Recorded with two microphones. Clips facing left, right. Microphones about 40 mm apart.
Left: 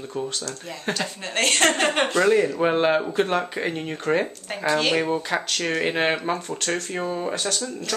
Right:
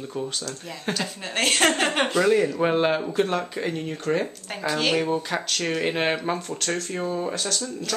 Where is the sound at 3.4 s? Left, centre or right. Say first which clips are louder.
Left 1 dB; left.